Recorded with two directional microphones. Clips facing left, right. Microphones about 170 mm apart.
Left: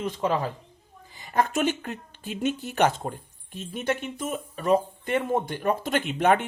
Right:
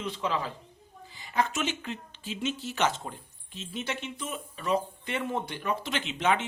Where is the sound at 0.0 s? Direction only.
45° left (ahead or behind).